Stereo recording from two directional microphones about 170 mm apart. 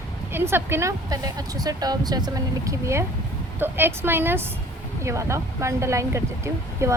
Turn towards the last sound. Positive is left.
turn(degrees=-15)  # may be behind; listen again after turning